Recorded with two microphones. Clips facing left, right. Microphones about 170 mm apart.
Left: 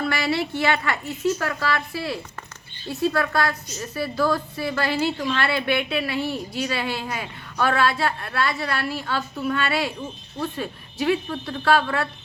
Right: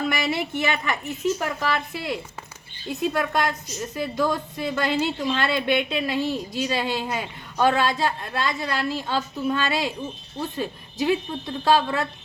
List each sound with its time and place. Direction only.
0.1 s a woman's voice: 20° right (ahead or behind)